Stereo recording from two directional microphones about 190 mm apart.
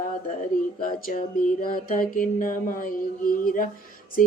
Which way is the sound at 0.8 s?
45° left (ahead or behind).